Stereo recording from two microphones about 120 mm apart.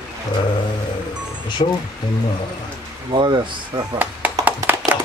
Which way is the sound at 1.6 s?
60° left (ahead or behind).